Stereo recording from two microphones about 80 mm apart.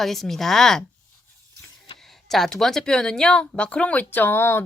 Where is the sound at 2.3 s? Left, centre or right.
Centre.